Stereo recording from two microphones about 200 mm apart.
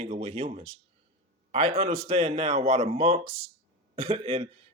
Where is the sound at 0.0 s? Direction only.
30° right (ahead or behind).